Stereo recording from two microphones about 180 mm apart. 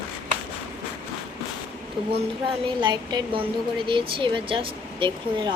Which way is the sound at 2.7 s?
25° right (ahead or behind).